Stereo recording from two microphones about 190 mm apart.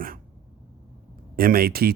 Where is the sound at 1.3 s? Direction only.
50° right (ahead or behind).